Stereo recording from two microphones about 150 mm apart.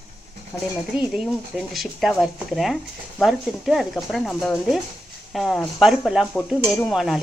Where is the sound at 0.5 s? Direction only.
5° left (ahead or behind).